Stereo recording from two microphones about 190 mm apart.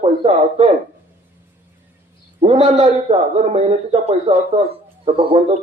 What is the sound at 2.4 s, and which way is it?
A man's voice, 35° right (ahead or behind).